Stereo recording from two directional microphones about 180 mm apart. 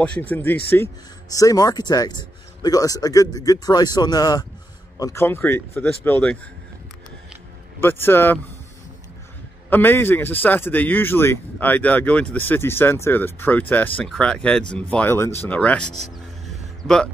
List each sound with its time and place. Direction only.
0.2 s a man's voice: 10° left (ahead or behind)
7.8 s speech: 10° left (ahead or behind)
9.7 s speech: 10° left (ahead or behind)